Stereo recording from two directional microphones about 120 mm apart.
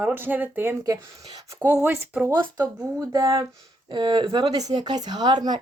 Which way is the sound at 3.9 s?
40° right (ahead or behind).